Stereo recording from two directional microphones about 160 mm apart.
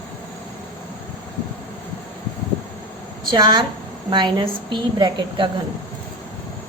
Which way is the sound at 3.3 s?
25° right (ahead or behind).